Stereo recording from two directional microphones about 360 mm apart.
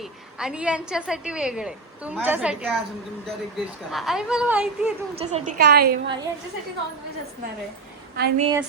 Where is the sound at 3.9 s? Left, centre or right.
Centre.